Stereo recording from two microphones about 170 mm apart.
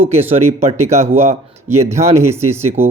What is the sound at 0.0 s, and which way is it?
Speech, 35° right (ahead or behind).